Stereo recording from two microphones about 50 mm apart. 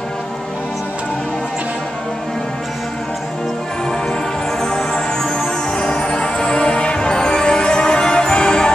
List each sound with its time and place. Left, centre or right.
4.6 s music: centre